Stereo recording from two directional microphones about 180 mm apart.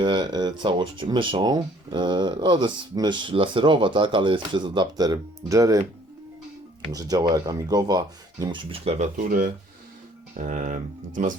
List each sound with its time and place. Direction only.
0.0 s speech: 25° right (ahead or behind)
6.9 s speech: 20° right (ahead or behind); by 11.3 s 45° right (ahead or behind)